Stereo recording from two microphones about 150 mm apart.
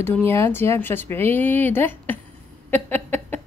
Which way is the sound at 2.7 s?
10° left (ahead or behind).